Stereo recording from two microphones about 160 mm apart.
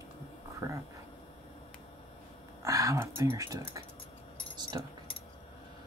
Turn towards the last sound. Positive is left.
turn(degrees=-25)  # may be behind; listen again after turning